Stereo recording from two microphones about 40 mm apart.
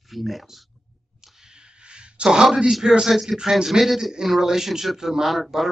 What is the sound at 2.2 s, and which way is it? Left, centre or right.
Speech, centre.